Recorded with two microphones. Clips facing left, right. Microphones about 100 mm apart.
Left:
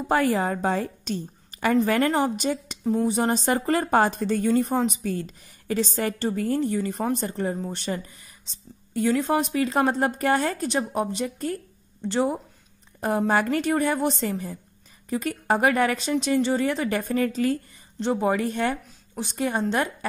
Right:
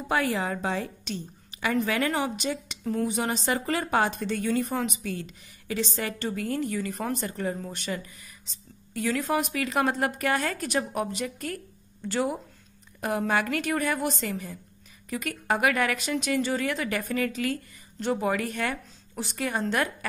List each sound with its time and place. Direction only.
0.1 s a woman's voice: 40° left (ahead or behind)
2.8 s speech: 20° left (ahead or behind)
3.2 s a woman's voice: 35° left (ahead or behind)
17.9 s speech: 20° left (ahead or behind)